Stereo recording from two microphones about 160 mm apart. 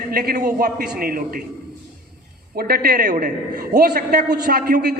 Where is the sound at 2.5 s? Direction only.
75° right (ahead or behind).